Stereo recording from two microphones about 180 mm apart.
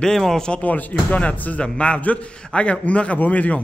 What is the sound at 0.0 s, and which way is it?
Speech, centre (ahead or behind).